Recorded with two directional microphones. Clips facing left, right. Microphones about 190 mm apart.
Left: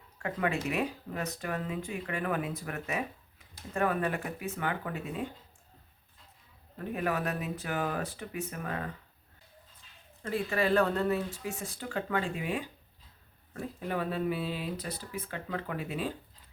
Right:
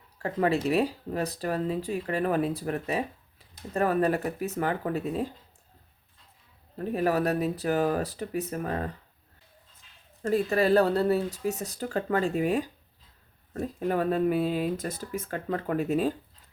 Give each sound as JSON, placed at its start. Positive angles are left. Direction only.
{"t": 0.2, "sound": "speech", "side_deg": -35}
{"t": 6.7, "sound": "speech", "side_deg": -35}
{"t": 10.2, "sound": "speech", "side_deg": -40}